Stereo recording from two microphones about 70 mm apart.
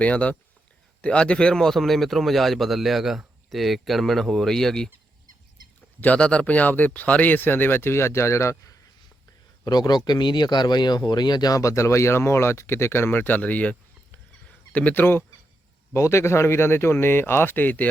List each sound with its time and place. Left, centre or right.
0.0 s speech: centre
6.0 s speech: centre; by 8.7 s left
9.6 s speech: left
11.6 s speech: left
15.9 s speech: left